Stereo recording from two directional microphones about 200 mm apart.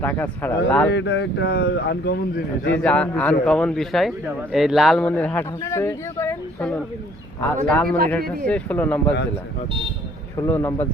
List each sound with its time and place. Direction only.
0.0 s speech: 10° left (ahead or behind)
0.9 s speech: 60° left (ahead or behind)
2.6 s speech: 5° left (ahead or behind)
10.4 s speech: 15° left (ahead or behind)